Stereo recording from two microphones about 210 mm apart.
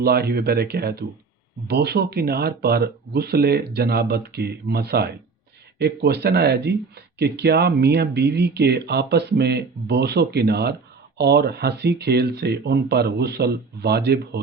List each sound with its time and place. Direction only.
0.0 s speech: 50° right (ahead or behind)